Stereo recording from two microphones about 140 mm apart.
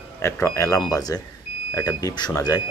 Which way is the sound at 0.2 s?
20° left (ahead or behind).